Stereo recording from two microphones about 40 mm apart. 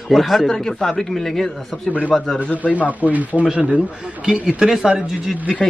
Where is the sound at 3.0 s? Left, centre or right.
Right.